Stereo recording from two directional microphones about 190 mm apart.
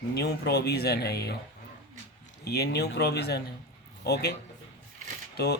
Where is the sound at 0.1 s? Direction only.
60° left (ahead or behind).